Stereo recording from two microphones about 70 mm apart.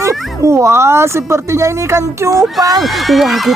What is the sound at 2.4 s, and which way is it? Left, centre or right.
Speech, centre.